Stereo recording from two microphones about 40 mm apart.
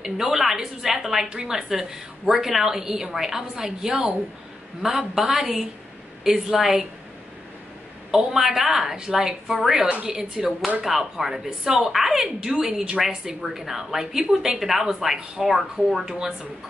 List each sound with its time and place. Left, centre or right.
0.0 s a woman's voice: centre
6.2 s a woman's voice: centre
8.3 s a woman's voice: centre
14.6 s speech: centre